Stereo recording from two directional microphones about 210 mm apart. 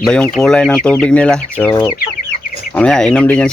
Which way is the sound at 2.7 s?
5° left (ahead or behind).